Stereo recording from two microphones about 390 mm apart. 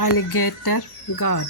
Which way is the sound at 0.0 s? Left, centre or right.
Left.